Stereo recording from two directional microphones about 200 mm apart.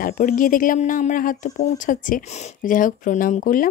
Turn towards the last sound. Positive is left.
turn(degrees=45)  # may be behind; listen again after turning